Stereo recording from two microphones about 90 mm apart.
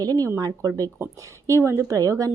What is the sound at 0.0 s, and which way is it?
A woman's voice, 45° right (ahead or behind).